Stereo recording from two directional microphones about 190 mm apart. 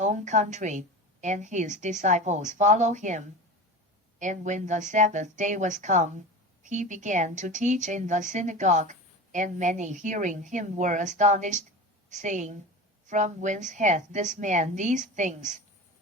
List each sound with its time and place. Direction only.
0.0 s a woman's voice: 40° right (ahead or behind)